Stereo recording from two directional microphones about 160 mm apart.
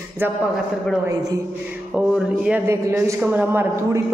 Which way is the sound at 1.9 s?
5° right (ahead or behind).